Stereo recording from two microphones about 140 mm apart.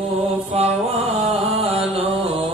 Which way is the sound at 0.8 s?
45° right (ahead or behind).